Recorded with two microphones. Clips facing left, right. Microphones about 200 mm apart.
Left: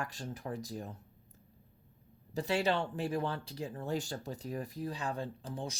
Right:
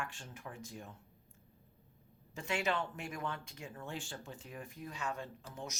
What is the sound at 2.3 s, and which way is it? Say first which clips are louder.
Speech: left 5 dB; 35° left (ahead or behind).